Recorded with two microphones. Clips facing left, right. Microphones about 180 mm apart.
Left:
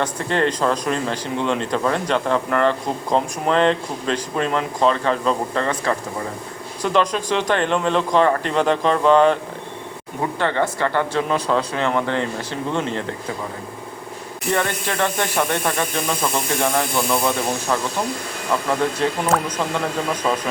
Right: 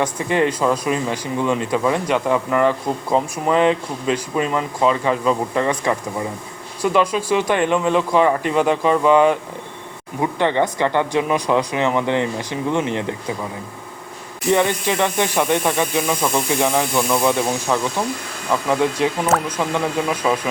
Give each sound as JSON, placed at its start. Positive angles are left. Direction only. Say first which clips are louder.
{"t": 0.0, "sound": "speech", "louder": "right 2 dB", "side_deg": -10}
{"t": 14.5, "sound": "speech", "louder": "right 5 dB", "side_deg": -15}
{"t": 18.9, "sound": "speech", "louder": "right 1 dB", "side_deg": -10}